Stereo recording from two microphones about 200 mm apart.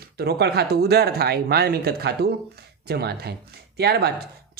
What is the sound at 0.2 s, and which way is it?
Speech, 55° right (ahead or behind).